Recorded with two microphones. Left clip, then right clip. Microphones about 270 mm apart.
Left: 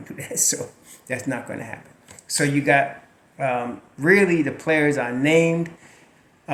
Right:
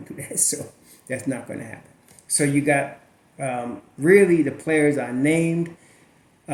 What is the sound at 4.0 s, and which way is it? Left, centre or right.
Speech, left.